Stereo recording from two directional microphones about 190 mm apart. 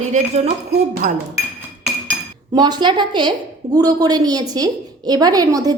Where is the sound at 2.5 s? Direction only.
20° right (ahead or behind).